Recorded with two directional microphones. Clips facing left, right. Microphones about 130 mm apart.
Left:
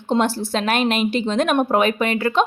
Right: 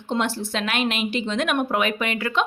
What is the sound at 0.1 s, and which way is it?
Speech, 35° left (ahead or behind).